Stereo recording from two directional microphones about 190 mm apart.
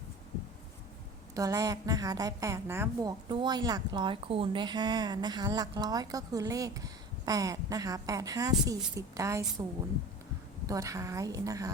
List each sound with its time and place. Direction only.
1.4 s a woman's voice: 20° right (ahead or behind)
10.7 s a woman's voice: 15° right (ahead or behind)